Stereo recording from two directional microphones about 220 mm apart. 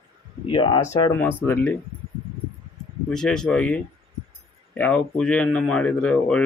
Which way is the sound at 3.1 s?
5° left (ahead or behind).